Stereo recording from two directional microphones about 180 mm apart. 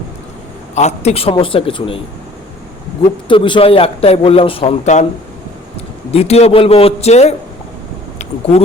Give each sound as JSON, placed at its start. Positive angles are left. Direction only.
{"t": 0.8, "sound": "speech", "side_deg": 40}
{"t": 3.2, "sound": "speech", "side_deg": 25}
{"t": 6.1, "sound": "speech", "side_deg": 35}